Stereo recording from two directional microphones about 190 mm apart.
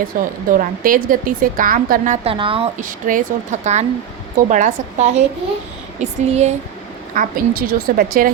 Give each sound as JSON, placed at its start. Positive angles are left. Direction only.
{"t": 0.1, "sound": "a woman's voice", "side_deg": -50}
{"t": 2.2, "sound": "a woman's voice", "side_deg": -30}
{"t": 2.7, "sound": "a woman's voice", "side_deg": -45}